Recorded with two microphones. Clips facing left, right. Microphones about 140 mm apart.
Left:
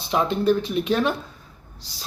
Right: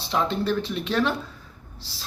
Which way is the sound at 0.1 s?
15° left (ahead or behind).